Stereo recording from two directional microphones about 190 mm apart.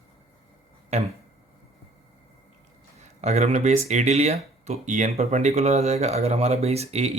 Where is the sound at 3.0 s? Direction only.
35° right (ahead or behind).